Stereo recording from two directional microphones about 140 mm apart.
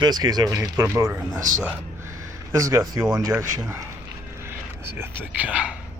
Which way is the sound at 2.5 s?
20° right (ahead or behind).